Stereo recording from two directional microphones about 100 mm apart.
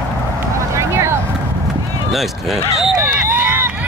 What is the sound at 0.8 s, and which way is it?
Vehicle, 30° right (ahead or behind).